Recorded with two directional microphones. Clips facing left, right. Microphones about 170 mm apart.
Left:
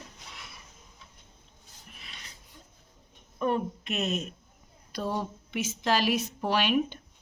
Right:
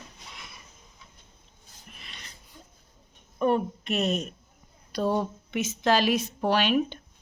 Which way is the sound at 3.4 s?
35° right (ahead or behind).